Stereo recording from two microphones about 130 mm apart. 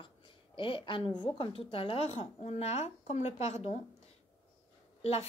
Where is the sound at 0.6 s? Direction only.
40° left (ahead or behind).